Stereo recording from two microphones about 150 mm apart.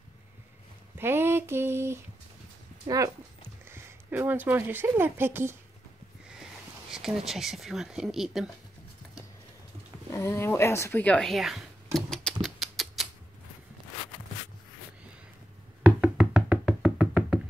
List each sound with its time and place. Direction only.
0.9 s a sound: 15° right (ahead or behind)
2.9 s speech: 20° right (ahead or behind)
6.2 s speech: 5° right (ahead or behind)
10.1 s speech: 20° left (ahead or behind)
12.4 s rodents: centre (ahead or behind)
15.8 s music: 5° right (ahead or behind)